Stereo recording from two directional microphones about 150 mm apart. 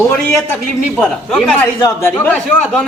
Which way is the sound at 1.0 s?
5° left (ahead or behind).